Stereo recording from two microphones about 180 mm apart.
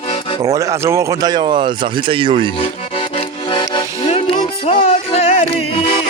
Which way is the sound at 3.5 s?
25° left (ahead or behind).